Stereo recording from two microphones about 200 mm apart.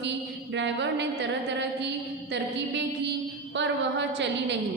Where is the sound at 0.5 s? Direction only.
60° right (ahead or behind).